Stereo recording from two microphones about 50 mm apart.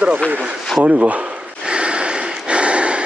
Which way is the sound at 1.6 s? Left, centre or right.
Right.